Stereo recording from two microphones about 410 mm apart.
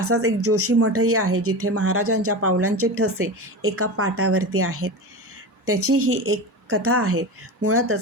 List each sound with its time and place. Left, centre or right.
0.0 s speech: right